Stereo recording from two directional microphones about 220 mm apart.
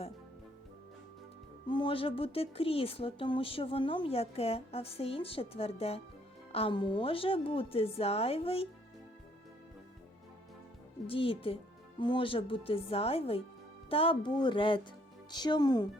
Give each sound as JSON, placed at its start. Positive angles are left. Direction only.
{"t": 1.6, "sound": "speech", "side_deg": 20}
{"t": 11.0, "sound": "speech", "side_deg": 25}